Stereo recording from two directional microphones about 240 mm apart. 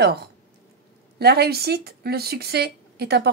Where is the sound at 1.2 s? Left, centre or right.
Right.